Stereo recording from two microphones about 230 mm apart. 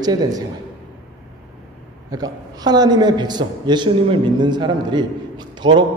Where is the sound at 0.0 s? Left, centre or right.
Centre.